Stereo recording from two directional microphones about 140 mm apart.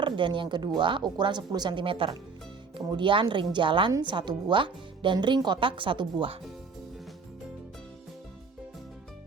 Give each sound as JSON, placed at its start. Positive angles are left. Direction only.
{"t": 0.0, "sound": "speech", "side_deg": -35}